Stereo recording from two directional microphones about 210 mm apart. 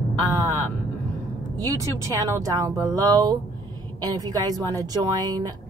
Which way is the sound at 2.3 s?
15° right (ahead or behind).